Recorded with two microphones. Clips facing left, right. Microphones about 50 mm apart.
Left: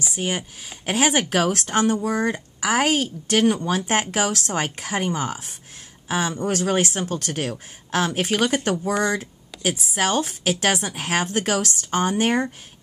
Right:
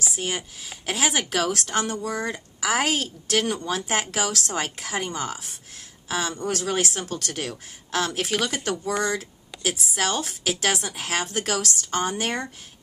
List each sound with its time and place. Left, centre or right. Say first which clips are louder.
0.2 s speech: left 3 dB; left; by 9.2 s centre
9.2 s a woman's voice: left 3 dB; centre